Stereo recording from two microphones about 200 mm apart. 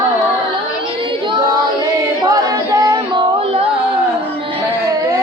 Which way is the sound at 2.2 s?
20° right (ahead or behind).